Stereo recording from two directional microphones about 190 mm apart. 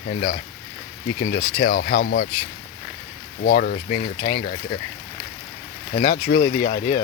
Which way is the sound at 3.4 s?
50° left (ahead or behind).